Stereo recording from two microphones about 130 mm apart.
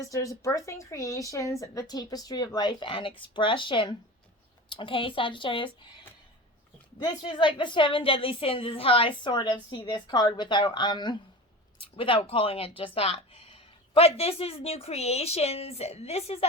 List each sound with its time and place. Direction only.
0.1 s a woman's voice: 25° left (ahead or behind); by 5.7 s 40° left (ahead or behind)
7.0 s a woman's voice: 35° left (ahead or behind); by 16.5 s 50° left (ahead or behind)